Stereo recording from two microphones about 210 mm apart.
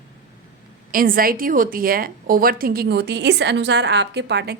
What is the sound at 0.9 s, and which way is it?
Speech, 40° right (ahead or behind).